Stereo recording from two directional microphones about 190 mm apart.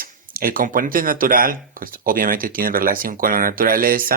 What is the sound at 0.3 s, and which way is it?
Speech, 50° right (ahead or behind).